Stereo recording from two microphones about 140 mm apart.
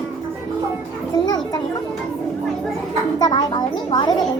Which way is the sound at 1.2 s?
30° left (ahead or behind).